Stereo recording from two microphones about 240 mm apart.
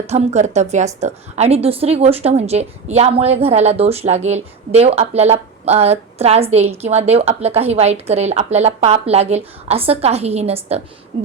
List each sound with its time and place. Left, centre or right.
0.1 s speech: right